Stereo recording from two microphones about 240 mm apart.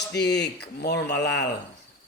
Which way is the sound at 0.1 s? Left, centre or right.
Left.